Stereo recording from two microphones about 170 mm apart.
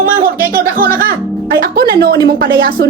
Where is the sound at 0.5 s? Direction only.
60° right (ahead or behind).